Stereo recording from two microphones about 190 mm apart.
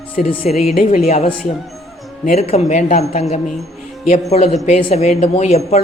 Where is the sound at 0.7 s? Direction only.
50° left (ahead or behind).